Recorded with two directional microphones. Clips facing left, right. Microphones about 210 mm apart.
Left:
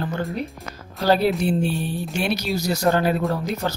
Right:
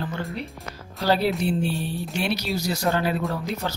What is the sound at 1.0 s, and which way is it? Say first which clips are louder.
Speech: left 3 dB; 50° left (ahead or behind).